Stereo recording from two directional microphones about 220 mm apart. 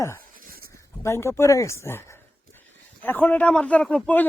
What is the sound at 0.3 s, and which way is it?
Dog, 40° right (ahead or behind).